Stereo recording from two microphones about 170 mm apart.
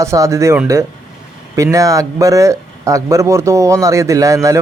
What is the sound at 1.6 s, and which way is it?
A man's voice, 20° right (ahead or behind).